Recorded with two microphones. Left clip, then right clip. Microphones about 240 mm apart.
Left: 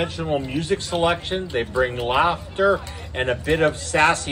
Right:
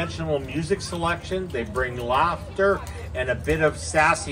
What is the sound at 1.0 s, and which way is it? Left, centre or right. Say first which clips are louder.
Speech: left 4 dB; centre.